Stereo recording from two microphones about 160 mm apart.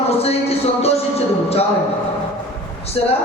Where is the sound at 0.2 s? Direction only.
40° left (ahead or behind).